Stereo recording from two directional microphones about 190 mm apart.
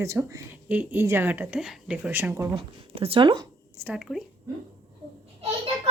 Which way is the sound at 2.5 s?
30° right (ahead or behind).